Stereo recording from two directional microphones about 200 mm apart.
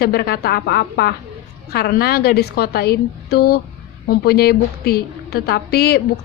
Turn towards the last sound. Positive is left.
turn(degrees=50)  # may be behind; listen again after turning